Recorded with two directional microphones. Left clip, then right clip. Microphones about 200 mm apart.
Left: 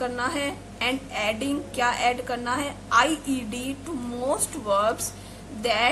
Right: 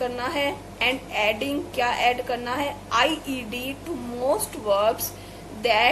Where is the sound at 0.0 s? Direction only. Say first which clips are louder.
Right 2 dB; 20° left (ahead or behind).